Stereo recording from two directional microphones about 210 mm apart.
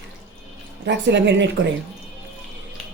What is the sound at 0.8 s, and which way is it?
Speech, 55° right (ahead or behind).